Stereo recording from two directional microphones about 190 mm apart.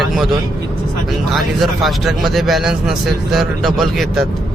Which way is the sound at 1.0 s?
Centre (ahead or behind).